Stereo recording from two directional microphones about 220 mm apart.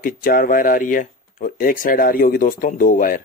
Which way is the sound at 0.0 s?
40° left (ahead or behind).